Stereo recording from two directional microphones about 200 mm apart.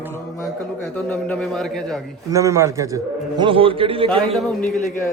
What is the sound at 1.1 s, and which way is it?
Speech, 5° left (ahead or behind).